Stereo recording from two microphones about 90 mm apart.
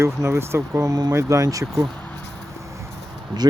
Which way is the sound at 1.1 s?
35° right (ahead or behind).